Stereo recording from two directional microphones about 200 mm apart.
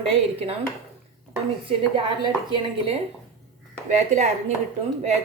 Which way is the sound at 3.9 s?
35° right (ahead or behind).